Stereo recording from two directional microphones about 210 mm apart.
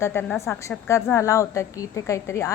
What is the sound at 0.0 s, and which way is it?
A woman's voice, 10° left (ahead or behind).